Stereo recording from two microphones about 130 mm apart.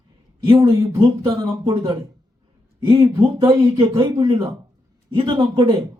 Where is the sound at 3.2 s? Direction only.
40° right (ahead or behind).